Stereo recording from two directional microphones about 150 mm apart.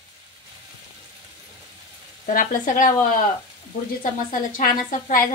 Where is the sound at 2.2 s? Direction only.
65° left (ahead or behind).